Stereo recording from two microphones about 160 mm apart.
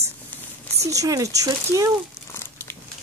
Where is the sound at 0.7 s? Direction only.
20° right (ahead or behind).